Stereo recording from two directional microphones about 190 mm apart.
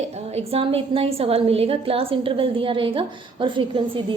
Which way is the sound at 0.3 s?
30° right (ahead or behind).